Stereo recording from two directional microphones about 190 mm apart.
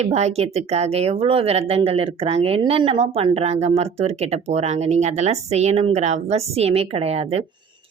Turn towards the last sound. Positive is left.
turn(degrees=-30)  # may be behind; listen again after turning